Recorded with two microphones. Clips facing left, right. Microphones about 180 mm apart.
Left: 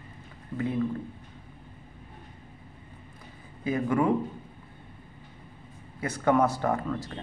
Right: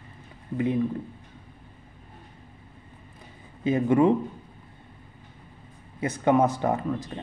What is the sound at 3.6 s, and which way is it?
Speech, 25° right (ahead or behind).